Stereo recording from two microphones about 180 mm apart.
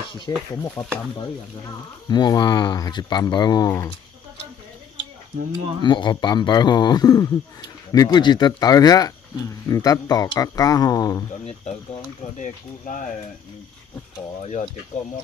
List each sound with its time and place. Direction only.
0.3 s speech: 20° left (ahead or behind)
2.0 s speech: 20° left (ahead or behind)
5.8 s speech: 25° left (ahead or behind)
12.4 s speech: 45° left (ahead or behind)
14.4 s speech: 35° left (ahead or behind)